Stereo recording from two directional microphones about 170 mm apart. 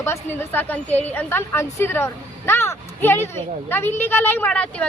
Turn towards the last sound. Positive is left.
turn(degrees=10)  # may be behind; listen again after turning